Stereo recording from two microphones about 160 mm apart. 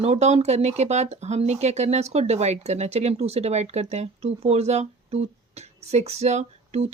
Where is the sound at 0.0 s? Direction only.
40° right (ahead or behind).